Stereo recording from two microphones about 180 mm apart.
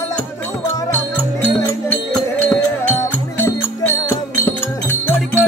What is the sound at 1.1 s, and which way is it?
Music, 10° left (ahead or behind).